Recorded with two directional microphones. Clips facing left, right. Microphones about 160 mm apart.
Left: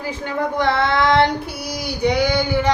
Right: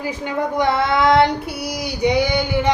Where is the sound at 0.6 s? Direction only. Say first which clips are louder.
Right 1 dB; 10° right (ahead or behind).